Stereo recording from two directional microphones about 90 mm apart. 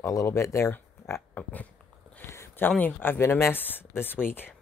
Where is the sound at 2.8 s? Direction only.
20° left (ahead or behind).